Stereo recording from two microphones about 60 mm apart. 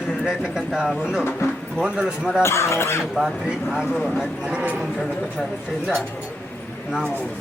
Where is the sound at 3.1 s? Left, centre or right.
Centre.